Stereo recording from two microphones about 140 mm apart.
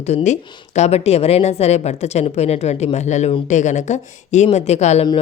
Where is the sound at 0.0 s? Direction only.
55° left (ahead or behind).